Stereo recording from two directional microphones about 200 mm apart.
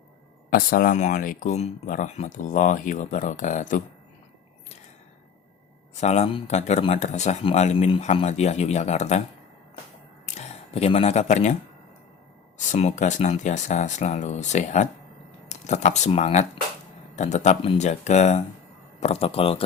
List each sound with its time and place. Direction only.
0.5 s speech: 45° left (ahead or behind)
5.9 s speech: 35° left (ahead or behind)
10.2 s speech: 35° left (ahead or behind)
12.5 s speech: 35° left (ahead or behind)